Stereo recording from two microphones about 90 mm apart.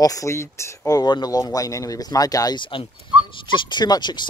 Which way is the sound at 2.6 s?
70° left (ahead or behind).